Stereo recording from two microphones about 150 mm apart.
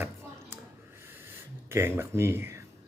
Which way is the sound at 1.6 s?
15° right (ahead or behind).